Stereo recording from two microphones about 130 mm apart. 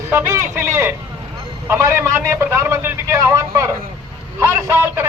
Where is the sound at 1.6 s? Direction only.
20° right (ahead or behind).